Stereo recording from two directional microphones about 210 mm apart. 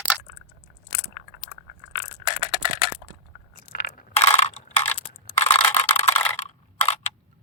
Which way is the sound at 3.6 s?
45° left (ahead or behind).